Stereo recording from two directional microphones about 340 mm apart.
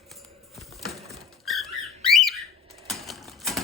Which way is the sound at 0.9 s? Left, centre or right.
Centre.